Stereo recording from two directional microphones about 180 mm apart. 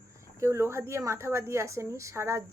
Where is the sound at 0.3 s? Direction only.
15° right (ahead or behind).